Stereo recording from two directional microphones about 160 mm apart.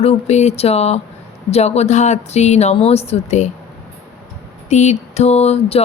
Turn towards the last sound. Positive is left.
turn(degrees=40)  # may be behind; listen again after turning